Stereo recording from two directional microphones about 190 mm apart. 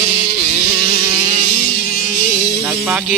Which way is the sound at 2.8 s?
Centre (ahead or behind).